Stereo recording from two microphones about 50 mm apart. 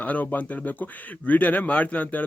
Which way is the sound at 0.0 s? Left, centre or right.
Left.